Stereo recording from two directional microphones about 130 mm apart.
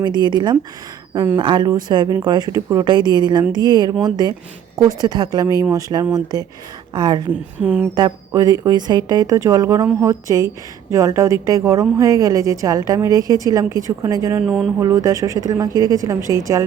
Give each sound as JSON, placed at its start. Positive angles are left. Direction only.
{"t": 0.0, "sound": "a woman's voice", "side_deg": -35}
{"t": 7.6, "sound": "speech", "side_deg": -10}
{"t": 7.9, "sound": "a woman's voice", "side_deg": -30}
{"t": 14.4, "sound": "speech", "side_deg": 0}
{"t": 14.8, "sound": "a woman's voice", "side_deg": -25}